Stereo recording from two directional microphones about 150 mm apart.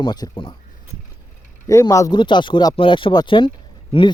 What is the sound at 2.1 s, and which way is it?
Speech, 30° left (ahead or behind).